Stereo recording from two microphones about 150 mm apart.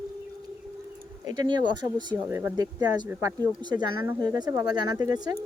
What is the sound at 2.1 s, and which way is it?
Speech, 15° right (ahead or behind).